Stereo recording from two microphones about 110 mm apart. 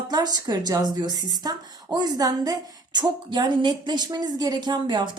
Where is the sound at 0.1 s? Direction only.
40° right (ahead or behind).